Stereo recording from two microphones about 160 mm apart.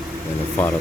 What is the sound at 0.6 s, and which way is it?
Speech, 10° left (ahead or behind).